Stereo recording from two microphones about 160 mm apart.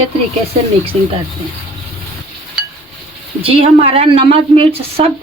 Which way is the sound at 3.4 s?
35° right (ahead or behind).